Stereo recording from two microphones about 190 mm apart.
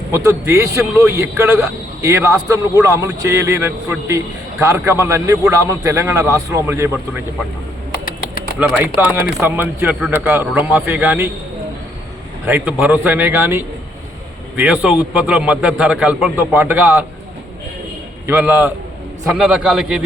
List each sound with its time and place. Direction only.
0.1 s a man's voice: 15° right (ahead or behind)
8.5 s a man's voice: 5° right (ahead or behind)
12.5 s a man's voice: 10° right (ahead or behind)
18.3 s a man's voice: 10° right (ahead or behind)